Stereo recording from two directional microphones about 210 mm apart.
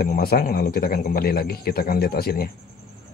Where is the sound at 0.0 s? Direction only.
45° left (ahead or behind).